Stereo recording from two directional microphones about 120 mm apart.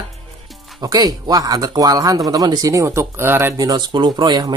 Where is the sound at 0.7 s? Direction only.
30° right (ahead or behind).